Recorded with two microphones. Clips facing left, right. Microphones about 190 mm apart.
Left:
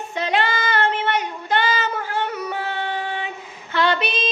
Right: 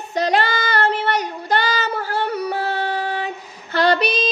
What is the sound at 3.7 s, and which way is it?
Female singing, 40° right (ahead or behind).